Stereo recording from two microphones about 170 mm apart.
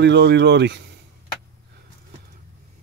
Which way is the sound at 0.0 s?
90° right.